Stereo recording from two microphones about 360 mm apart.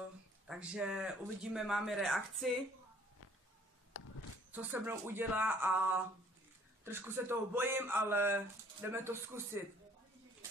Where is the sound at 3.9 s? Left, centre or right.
Left.